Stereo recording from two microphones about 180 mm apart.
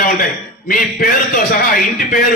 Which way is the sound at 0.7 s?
50° left (ahead or behind).